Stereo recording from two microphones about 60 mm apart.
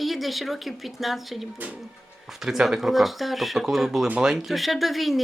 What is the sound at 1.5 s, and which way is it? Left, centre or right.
Speech, right.